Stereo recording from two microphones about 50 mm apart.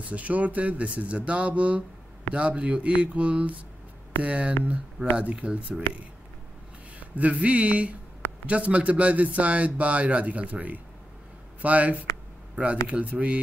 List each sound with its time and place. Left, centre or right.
0.1 s a man's voice: right
7.2 s a man's voice: right